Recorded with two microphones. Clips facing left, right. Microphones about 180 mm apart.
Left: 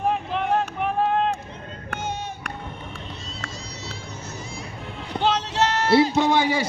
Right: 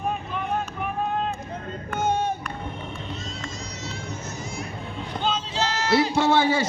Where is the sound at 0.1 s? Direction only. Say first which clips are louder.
Left 5 dB; 70° left (ahead or behind).